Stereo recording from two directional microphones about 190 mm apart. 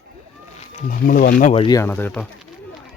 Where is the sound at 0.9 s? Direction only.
45° left (ahead or behind).